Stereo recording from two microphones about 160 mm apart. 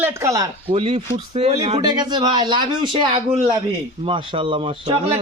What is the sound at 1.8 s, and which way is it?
Speech, 25° right (ahead or behind).